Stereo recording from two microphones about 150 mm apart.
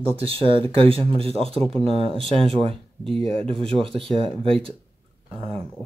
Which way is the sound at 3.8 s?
35° right (ahead or behind).